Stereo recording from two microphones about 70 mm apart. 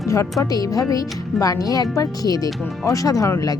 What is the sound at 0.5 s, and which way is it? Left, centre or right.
Speech, left.